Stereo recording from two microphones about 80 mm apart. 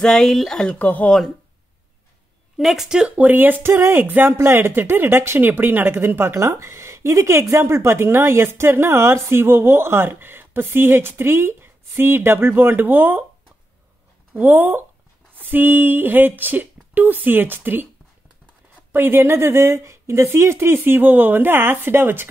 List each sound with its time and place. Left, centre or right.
0.0 s speech: centre
2.5 s speech: centre
3.2 s speech: right
14.3 s speech: right
18.9 s speech: right